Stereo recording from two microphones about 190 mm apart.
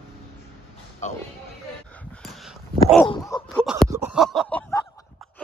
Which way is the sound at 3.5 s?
Centre (ahead or behind).